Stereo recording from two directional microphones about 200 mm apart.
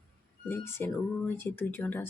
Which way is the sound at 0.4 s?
10° left (ahead or behind).